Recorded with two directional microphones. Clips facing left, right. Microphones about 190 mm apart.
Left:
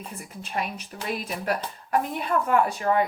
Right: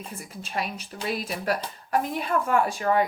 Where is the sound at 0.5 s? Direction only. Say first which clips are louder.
Left 1 dB; 35° right (ahead or behind).